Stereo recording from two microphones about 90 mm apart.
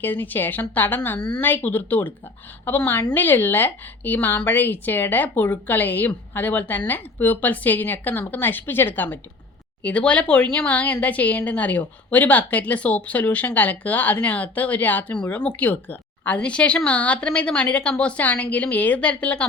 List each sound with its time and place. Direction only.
0.0 s a woman's voice: 20° left (ahead or behind)